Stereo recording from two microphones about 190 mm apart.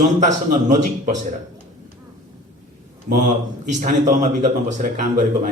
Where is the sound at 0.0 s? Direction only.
40° right (ahead or behind).